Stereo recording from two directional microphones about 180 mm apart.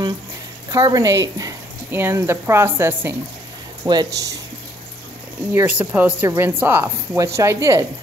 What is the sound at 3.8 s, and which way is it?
Speech, 25° right (ahead or behind).